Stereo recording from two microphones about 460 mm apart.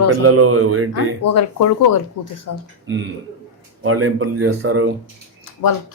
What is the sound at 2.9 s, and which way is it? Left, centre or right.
Speech, right.